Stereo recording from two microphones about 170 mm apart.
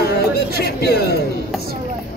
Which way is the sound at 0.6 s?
65° left (ahead or behind).